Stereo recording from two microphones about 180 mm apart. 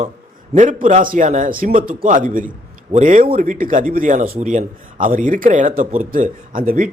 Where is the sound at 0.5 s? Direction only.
45° right (ahead or behind).